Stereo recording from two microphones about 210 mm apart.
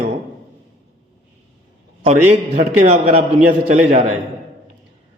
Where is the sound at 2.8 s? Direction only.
30° right (ahead or behind).